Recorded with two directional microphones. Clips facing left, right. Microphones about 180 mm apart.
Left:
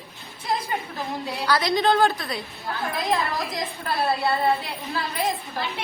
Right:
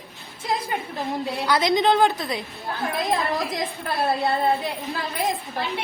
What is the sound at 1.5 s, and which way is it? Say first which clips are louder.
Speech: right 1 dB; 20° right (ahead or behind).